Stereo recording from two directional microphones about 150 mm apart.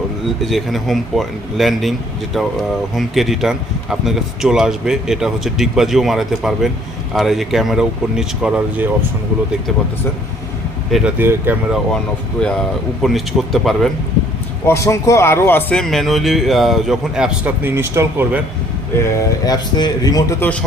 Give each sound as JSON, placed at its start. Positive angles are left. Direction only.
{"t": 0.4, "sound": "a man's voice", "side_deg": 0}
{"t": 10.9, "sound": "speech", "side_deg": -10}
{"t": 12.4, "sound": "a man's voice", "side_deg": 5}
{"t": 14.7, "sound": "a man's voice", "side_deg": 20}
{"t": 19.0, "sound": "speech", "side_deg": 20}
{"t": 20.4, "sound": "speech", "side_deg": 10}